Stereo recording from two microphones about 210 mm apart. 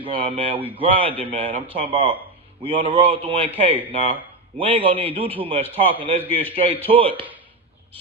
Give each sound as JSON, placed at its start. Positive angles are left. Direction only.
{"t": 0.0, "sound": "a man's voice", "side_deg": -25}
{"t": 4.6, "sound": "a man's voice", "side_deg": -25}